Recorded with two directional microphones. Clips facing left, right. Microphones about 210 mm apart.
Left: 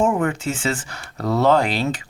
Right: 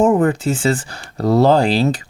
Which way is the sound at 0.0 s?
35° right (ahead or behind).